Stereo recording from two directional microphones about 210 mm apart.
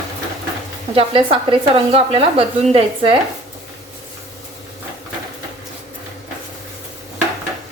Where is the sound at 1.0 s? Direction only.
25° right (ahead or behind).